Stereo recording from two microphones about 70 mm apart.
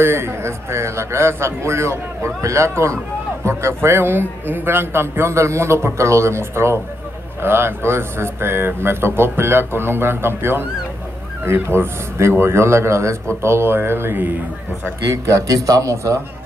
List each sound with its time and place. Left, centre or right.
0.0 s speech: right
15.0 s a man's voice: right